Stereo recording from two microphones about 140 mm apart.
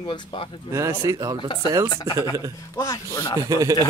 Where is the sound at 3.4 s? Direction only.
25° right (ahead or behind).